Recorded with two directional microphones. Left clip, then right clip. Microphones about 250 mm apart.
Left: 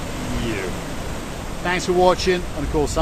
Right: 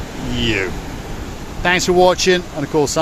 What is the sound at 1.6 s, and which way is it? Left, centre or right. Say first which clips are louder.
Speech: right 5 dB; right.